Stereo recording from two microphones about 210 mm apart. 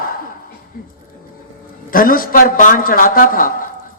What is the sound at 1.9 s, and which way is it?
Speech, 45° left (ahead or behind).